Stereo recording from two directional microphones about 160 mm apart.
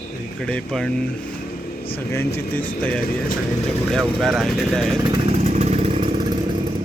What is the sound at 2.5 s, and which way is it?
Speech, 5° left (ahead or behind).